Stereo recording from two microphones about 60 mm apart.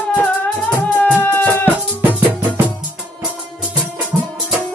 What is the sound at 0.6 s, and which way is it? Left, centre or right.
Music, centre.